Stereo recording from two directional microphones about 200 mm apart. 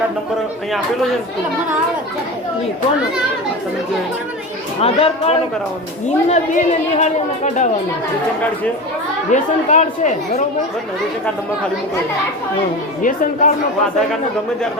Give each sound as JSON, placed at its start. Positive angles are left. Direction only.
{"t": 4.8, "sound": "a woman's voice", "side_deg": 30}
{"t": 9.3, "sound": "a woman's voice", "side_deg": 35}
{"t": 13.0, "sound": "speech", "side_deg": 40}